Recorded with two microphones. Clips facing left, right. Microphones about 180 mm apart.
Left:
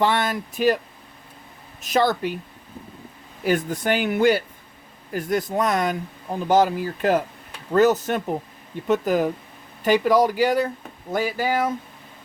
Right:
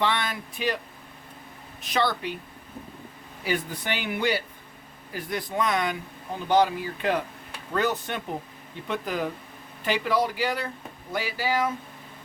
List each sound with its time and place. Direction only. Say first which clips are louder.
0.0 s speech: left 6 dB; 45° left (ahead or behind)
1.8 s speech: left 6 dB; 45° left (ahead or behind)
3.4 s speech: left 7 dB; 45° left (ahead or behind)